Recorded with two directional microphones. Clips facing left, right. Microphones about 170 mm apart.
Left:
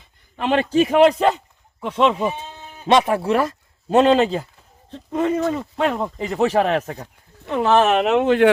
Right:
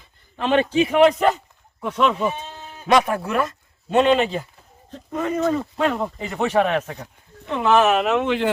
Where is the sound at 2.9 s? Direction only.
25° left (ahead or behind).